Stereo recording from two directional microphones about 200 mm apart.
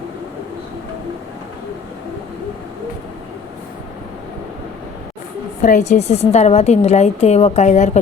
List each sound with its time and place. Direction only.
5.6 s a woman's voice: 40° left (ahead or behind)